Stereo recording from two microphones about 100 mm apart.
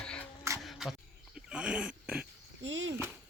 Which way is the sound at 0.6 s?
Centre (ahead or behind).